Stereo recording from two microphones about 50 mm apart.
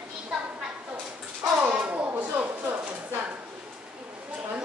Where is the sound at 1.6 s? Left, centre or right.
Right.